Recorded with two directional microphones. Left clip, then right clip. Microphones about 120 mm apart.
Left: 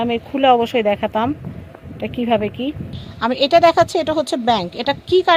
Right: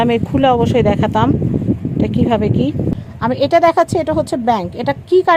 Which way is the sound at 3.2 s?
45° right (ahead or behind).